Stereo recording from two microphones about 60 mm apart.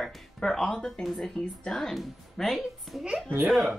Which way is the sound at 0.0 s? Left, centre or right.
Centre.